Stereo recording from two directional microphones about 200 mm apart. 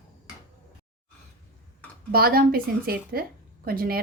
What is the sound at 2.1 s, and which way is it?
A woman's voice, 50° right (ahead or behind).